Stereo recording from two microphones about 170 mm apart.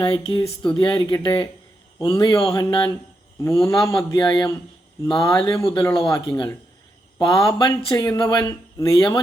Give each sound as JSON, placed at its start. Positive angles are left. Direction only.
{"t": 0.0, "sound": "speech", "side_deg": 30}
{"t": 5.5, "sound": "speech", "side_deg": 20}